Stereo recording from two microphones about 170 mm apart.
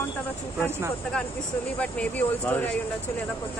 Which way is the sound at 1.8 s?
10° left (ahead or behind).